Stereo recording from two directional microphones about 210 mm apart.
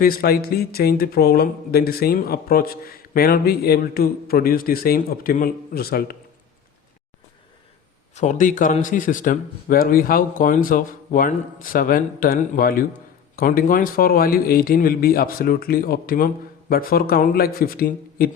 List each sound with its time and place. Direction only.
0.0 s speech: 45° left (ahead or behind)
8.1 s a man's voice: 35° left (ahead or behind)